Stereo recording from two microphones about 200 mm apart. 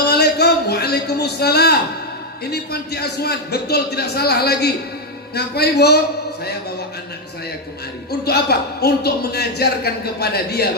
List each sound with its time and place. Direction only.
0.1 s a sound: 55° left (ahead or behind)
2.4 s speech: 55° left (ahead or behind)
8.2 s speech: 55° left (ahead or behind)